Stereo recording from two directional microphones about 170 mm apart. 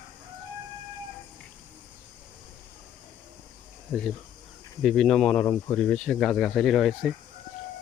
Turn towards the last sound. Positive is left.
turn(degrees=0)  # may be behind; listen again after turning